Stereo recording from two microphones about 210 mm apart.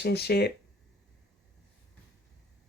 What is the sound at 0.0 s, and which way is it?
Speech, 50° left (ahead or behind).